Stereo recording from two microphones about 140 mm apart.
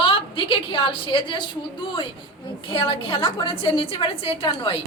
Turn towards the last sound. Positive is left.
turn(degrees=40)  # may be behind; listen again after turning